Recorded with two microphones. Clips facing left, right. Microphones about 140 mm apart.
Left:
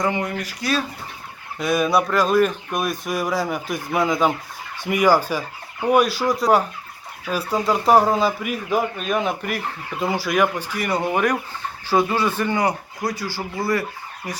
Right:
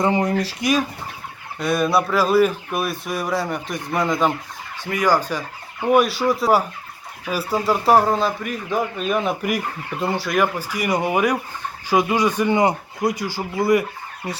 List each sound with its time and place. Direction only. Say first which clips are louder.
0.0 s speech: right 4 dB; 35° right (ahead or behind)
0.6 s speech: right 2 dB; 15° right (ahead or behind)
1.5 s speech: even; centre (ahead or behind)
4.9 s fowl: left 2 dB; 10° left (ahead or behind)
5.8 s speech: right 1 dB; centre (ahead or behind); by 13.8 s 20° right (ahead or behind)